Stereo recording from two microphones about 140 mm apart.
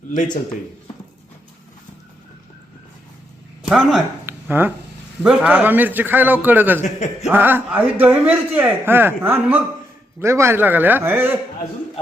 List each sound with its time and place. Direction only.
3.7 s speech: 5° right (ahead or behind)
4.3 s a sound: 15° right (ahead or behind)
5.2 s a man's voice: 5° right (ahead or behind)
6.8 s speech: 55° left (ahead or behind)
7.3 s a man's voice: 15° right (ahead or behind)